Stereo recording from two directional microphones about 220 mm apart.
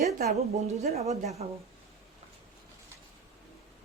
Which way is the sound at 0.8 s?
30° right (ahead or behind).